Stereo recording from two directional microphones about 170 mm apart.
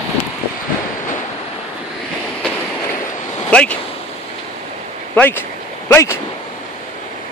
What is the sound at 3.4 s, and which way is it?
Speech, 5° left (ahead or behind).